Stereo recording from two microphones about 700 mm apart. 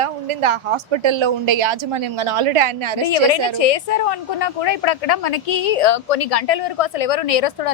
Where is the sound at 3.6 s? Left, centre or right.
Left.